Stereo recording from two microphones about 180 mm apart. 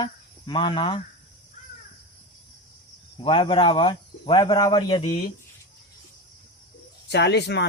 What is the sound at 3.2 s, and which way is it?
Speech, 30° left (ahead or behind).